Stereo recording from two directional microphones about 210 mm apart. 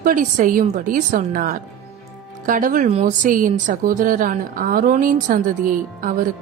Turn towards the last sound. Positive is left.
turn(degrees=-40)  # may be behind; listen again after turning